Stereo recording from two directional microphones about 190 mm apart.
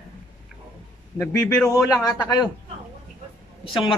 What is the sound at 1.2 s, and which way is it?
A man's voice, 15° left (ahead or behind).